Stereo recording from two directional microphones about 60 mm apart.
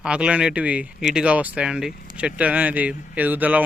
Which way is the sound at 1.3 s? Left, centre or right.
Right.